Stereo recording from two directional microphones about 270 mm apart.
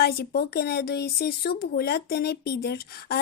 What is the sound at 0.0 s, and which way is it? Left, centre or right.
Speech, left.